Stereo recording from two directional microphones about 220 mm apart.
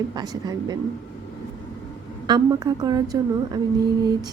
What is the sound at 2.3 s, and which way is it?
A woman's voice, 20° right (ahead or behind).